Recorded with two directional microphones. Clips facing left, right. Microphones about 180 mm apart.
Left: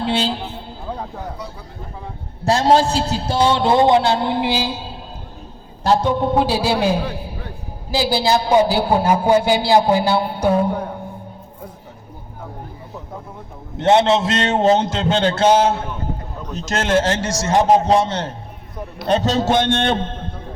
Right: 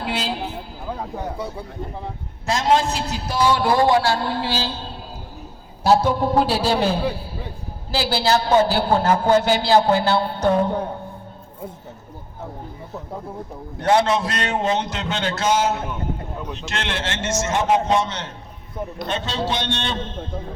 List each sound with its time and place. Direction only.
0.0 s music: 30° left (ahead or behind)
2.4 s a man's voice: 35° left (ahead or behind); by 4.9 s 10° left (ahead or behind)
5.8 s a man's voice: 5° right (ahead or behind); by 7.0 s 10° left (ahead or behind)
7.1 s music: 15° left (ahead or behind)
7.9 s a man's voice: 15° left (ahead or behind)
13.7 s a man's voice: 25° left (ahead or behind)
16.6 s a man's voice: 40° left (ahead or behind); by 20.4 s 55° left (ahead or behind)